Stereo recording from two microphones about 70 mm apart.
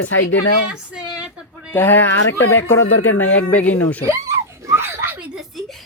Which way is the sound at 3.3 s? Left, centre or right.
Left.